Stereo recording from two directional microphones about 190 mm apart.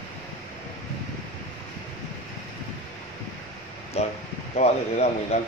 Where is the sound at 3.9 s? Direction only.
35° left (ahead or behind).